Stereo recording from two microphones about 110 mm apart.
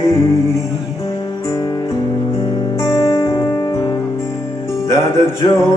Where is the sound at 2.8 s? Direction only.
30° left (ahead or behind).